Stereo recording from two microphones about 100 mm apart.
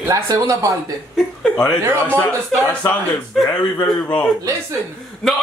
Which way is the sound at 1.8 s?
25° right (ahead or behind).